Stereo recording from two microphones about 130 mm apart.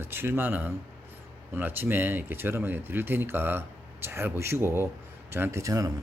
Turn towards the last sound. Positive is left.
turn(degrees=-25)  # may be behind; listen again after turning